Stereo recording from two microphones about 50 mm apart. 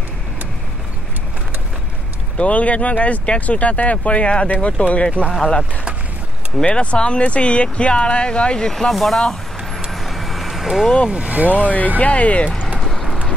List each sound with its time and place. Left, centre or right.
2.3 s speech: left
8.7 s speech: centre
9.8 s vehicle: centre
11.1 s speech: centre
11.3 s speech: right
12.0 s speech: left
12.6 s a sound: centre